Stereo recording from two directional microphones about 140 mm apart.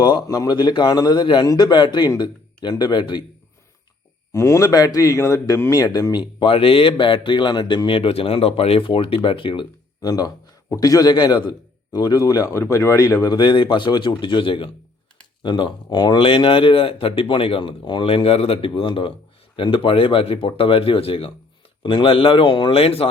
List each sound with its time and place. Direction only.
0.0 s speech: 25° left (ahead or behind)
4.3 s speech: 20° left (ahead or behind); by 9.6 s 40° left (ahead or behind)
10.0 s a man's voice: 25° left (ahead or behind); by 23.0 s 45° left (ahead or behind)